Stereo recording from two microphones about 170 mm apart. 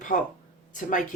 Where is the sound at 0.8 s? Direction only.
50° left (ahead or behind).